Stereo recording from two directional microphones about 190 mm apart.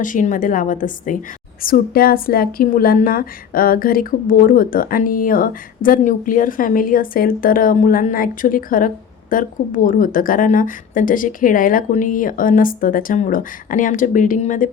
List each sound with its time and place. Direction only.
0.0 s a woman's voice: 45° left (ahead or behind)